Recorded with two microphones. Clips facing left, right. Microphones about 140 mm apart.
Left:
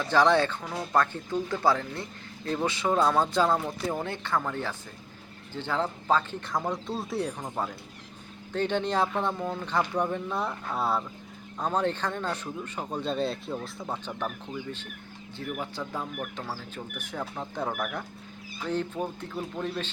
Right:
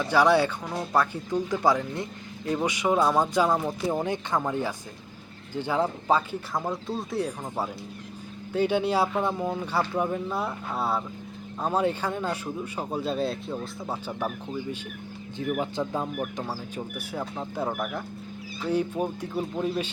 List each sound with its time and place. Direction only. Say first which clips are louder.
0.0 s speech: right 1 dB; 10° right (ahead or behind)